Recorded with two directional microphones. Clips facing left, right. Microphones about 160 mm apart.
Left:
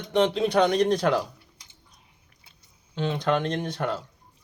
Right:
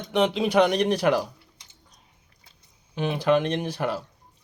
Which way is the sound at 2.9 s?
10° right (ahead or behind).